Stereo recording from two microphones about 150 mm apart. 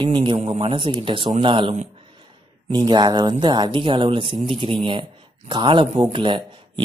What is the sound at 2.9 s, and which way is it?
A man's voice, 30° right (ahead or behind).